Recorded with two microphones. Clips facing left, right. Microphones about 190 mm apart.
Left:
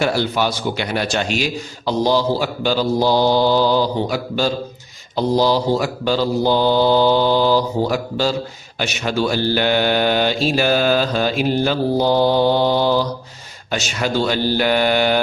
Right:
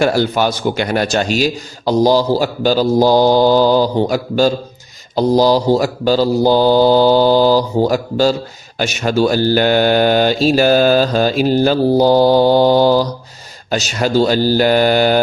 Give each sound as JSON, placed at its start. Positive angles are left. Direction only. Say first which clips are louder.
{"t": 0.0, "sound": "a man's voice", "louder": "right 4 dB", "side_deg": -45}
{"t": 5.1, "sound": "mantra", "louder": "right 5 dB", "side_deg": -40}